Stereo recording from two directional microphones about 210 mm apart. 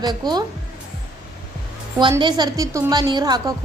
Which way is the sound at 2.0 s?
20° right (ahead or behind).